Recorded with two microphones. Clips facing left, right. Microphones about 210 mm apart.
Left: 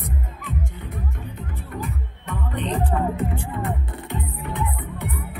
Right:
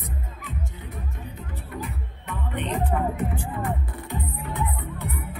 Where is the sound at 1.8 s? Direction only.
40° left (ahead or behind).